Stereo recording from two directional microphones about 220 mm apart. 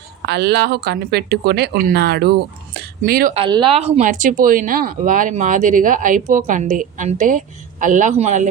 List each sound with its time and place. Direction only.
0.3 s speech: 50° right (ahead or behind)
3.3 s speech: 20° right (ahead or behind)